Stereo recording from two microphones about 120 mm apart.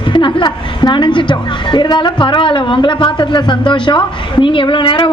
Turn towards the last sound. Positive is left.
turn(degrees=45)  # may be behind; listen again after turning